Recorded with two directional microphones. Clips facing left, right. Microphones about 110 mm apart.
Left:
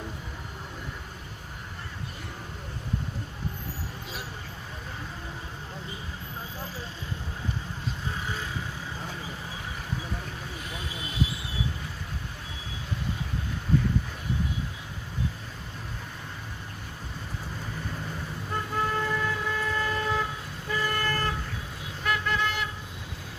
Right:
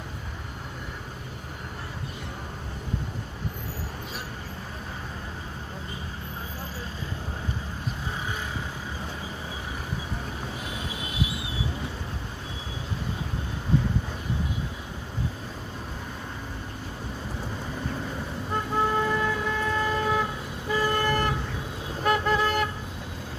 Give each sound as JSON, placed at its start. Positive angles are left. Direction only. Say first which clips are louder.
{"t": 18.5, "sound": "vehicle", "louder": "right 4 dB", "side_deg": -20}
{"t": 20.7, "sound": "toot", "louder": "right 4 dB", "side_deg": -20}
{"t": 22.0, "sound": "vehicle", "louder": "right 5 dB", "side_deg": -35}